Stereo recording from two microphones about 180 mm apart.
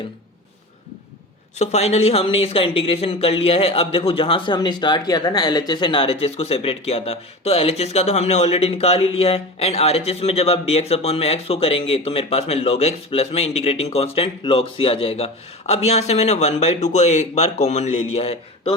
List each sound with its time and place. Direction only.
1.5 s speech: 40° left (ahead or behind)